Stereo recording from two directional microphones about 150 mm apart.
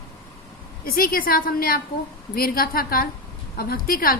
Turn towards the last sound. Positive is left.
turn(degrees=80)